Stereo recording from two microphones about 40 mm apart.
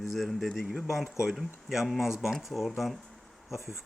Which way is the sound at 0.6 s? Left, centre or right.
Centre.